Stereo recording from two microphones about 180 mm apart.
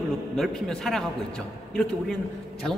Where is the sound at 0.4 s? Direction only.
Centre (ahead or behind).